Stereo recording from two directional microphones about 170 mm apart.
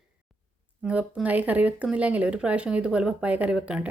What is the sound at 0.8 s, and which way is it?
Speech, 5° right (ahead or behind).